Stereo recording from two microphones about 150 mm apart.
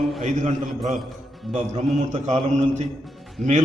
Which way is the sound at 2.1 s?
50° right (ahead or behind).